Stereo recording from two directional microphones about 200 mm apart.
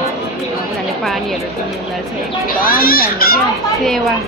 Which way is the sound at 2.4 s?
45° left (ahead or behind).